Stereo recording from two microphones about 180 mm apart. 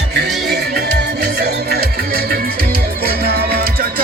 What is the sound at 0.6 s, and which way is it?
Music, 65° right (ahead or behind).